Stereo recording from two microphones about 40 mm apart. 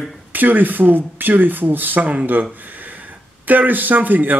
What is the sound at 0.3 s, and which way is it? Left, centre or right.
A man's voice, right.